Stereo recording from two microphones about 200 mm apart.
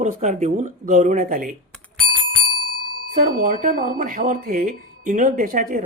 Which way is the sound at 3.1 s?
45° right (ahead or behind).